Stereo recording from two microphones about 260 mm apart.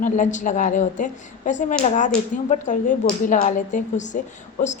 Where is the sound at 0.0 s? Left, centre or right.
Left.